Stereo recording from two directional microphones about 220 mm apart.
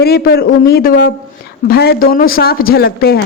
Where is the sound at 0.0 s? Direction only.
45° left (ahead or behind).